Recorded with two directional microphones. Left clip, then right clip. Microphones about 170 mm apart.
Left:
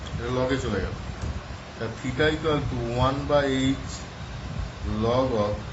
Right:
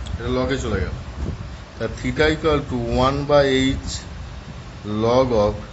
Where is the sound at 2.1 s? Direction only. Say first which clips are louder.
Right 5 dB; 65° right (ahead or behind).